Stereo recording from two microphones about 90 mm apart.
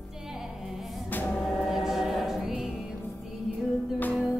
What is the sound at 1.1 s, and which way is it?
Music, 20° left (ahead or behind).